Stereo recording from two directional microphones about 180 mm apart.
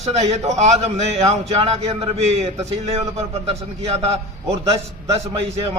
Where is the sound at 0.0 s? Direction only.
40° right (ahead or behind).